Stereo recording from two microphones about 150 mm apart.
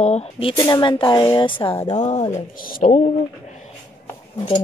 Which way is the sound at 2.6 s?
70° left (ahead or behind).